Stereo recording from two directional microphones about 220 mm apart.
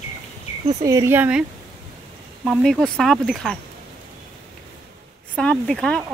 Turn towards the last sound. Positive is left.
turn(degrees=5)  # may be behind; listen again after turning